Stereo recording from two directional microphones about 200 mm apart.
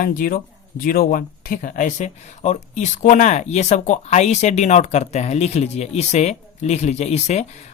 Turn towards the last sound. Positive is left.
turn(degrees=35)  # may be behind; listen again after turning